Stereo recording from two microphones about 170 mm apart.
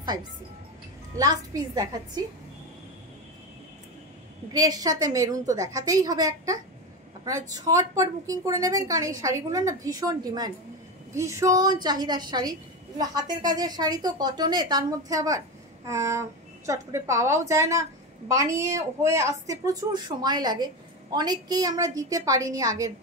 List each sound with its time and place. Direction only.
1.1 s a woman's voice: 20° right (ahead or behind)
4.5 s a woman's voice: 20° right (ahead or behind)